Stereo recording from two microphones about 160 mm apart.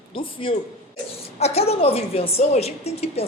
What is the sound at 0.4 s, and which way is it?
A woman's voice, 35° left (ahead or behind).